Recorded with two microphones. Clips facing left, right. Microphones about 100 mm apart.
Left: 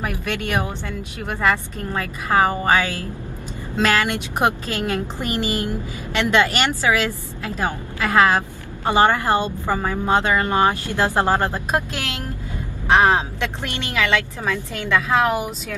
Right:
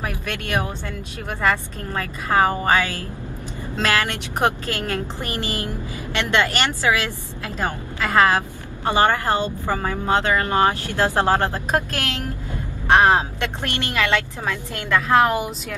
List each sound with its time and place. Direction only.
0.1 s a woman's voice: 15° left (ahead or behind)
12.9 s a woman's voice: centre (ahead or behind)